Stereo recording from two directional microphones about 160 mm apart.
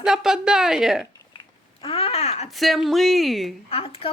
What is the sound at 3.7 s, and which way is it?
Speech, 35° left (ahead or behind).